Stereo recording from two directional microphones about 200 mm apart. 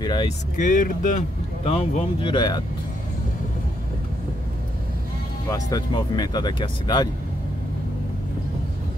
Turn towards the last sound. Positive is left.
turn(degrees=20)  # may be behind; listen again after turning